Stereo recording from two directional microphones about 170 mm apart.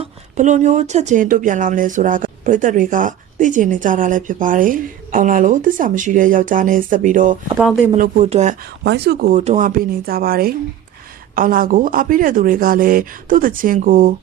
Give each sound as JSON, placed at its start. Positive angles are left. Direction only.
{"t": 0.0, "sound": "speech", "side_deg": -45}
{"t": 7.6, "sound": "speech", "side_deg": 0}
{"t": 8.2, "sound": "speech", "side_deg": -40}
{"t": 8.8, "sound": "speech", "side_deg": -85}
{"t": 9.3, "sound": "speech", "side_deg": -40}